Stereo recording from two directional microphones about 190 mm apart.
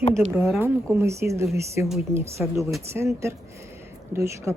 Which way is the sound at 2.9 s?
15° right (ahead or behind).